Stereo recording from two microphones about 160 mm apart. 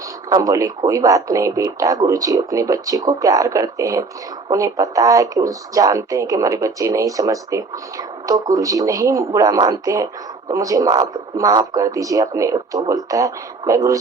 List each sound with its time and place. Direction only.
0.3 s speech: 20° right (ahead or behind)